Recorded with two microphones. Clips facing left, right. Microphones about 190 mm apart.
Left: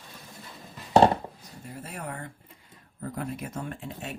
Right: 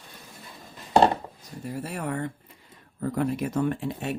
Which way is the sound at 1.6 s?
75° right (ahead or behind).